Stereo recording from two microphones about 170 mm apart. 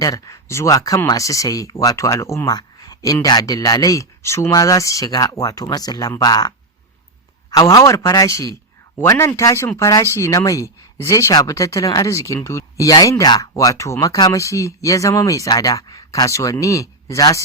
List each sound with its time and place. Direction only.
0.0 s speech: 20° left (ahead or behind)
7.5 s speech: 20° left (ahead or behind)